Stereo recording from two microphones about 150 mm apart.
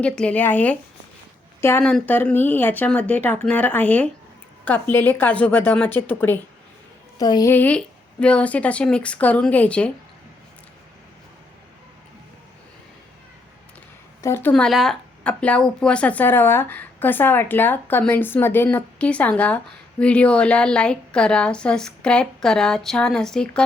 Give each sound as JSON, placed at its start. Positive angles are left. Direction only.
{"t": 0.0, "sound": "speech", "side_deg": 10}
{"t": 1.8, "sound": "speech", "side_deg": 10}
{"t": 7.2, "sound": "a woman's voice", "side_deg": 25}
{"t": 7.5, "sound": "speech", "side_deg": 10}
{"t": 14.2, "sound": "a woman's voice", "side_deg": 15}
{"t": 14.5, "sound": "speech", "side_deg": 0}